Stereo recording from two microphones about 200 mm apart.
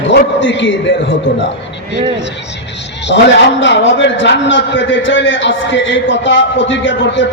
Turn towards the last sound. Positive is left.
turn(degrees=65)  # may be behind; listen again after turning